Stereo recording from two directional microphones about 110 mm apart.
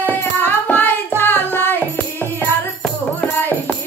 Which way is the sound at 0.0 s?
15° left (ahead or behind).